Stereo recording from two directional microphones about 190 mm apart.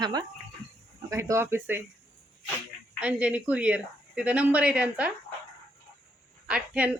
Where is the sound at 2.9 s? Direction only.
5° right (ahead or behind).